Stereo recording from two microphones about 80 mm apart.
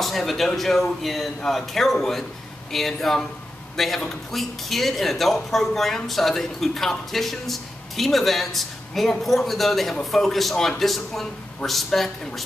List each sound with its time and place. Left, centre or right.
0.0 s speech: centre